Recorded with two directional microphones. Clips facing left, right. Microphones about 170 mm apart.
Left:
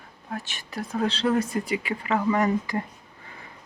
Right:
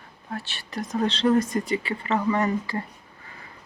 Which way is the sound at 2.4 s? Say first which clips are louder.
Left 1 dB; 15° left (ahead or behind).